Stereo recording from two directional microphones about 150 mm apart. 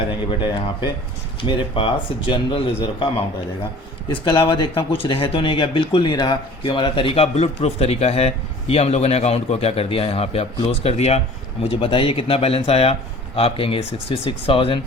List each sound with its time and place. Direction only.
0.3 s speech: 30° left (ahead or behind)
4.1 s speech: 30° left (ahead or behind)